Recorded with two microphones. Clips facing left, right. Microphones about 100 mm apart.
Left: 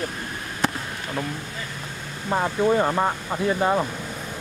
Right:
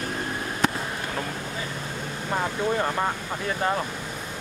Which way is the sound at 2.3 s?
15° left (ahead or behind).